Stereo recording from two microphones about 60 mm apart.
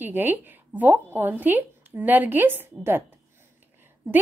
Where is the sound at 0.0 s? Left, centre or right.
Right.